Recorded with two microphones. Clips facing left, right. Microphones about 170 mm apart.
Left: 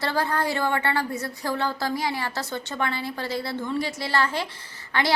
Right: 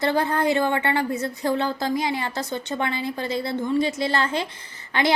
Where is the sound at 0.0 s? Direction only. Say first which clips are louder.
Right 4 dB; 20° right (ahead or behind).